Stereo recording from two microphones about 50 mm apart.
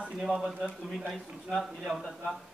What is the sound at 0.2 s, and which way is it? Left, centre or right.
Speech, centre.